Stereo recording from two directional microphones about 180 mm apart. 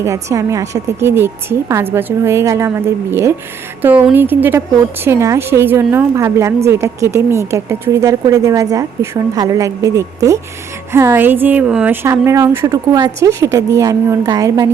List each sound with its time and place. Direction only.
0.0 s speech: 15° right (ahead or behind)